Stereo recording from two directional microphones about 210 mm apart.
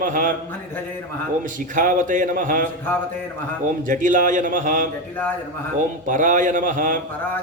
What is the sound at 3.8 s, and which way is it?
A man's voice, 40° right (ahead or behind).